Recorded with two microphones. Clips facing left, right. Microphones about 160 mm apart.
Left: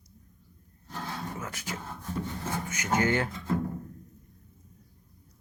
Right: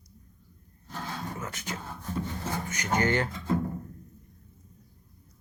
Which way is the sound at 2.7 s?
5° left (ahead or behind).